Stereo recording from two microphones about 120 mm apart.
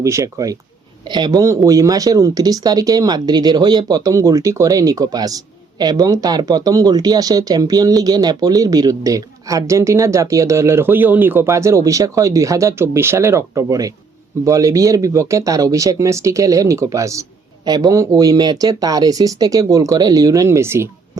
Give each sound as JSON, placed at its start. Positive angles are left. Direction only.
{"t": 0.0, "sound": "speech", "side_deg": -25}
{"t": 1.0, "sound": "speech", "side_deg": -35}